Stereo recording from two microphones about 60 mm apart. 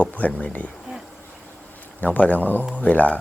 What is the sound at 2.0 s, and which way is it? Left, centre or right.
Speech, left.